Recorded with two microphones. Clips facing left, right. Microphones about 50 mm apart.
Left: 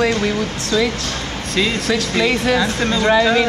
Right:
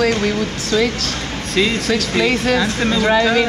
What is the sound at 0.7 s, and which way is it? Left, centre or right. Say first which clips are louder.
Speech: right 1 dB; right.